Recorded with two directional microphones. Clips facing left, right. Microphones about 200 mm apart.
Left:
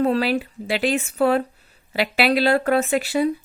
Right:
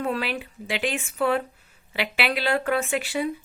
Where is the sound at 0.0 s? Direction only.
35° left (ahead or behind).